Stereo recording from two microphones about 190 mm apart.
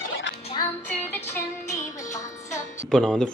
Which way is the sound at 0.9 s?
10° left (ahead or behind).